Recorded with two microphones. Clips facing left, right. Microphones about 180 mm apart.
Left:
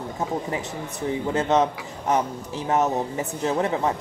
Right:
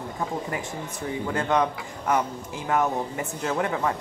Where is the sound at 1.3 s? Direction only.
20° left (ahead or behind).